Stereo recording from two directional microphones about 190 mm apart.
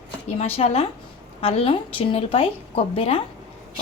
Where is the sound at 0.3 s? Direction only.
35° left (ahead or behind).